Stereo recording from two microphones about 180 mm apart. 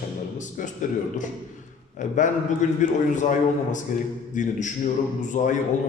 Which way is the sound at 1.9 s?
45° left (ahead or behind).